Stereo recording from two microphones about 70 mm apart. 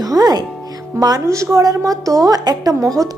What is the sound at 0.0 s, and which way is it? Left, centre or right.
Music, right.